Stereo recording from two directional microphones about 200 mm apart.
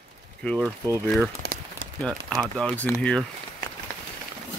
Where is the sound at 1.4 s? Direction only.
55° right (ahead or behind).